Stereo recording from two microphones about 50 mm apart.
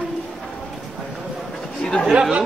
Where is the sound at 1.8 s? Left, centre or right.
Centre.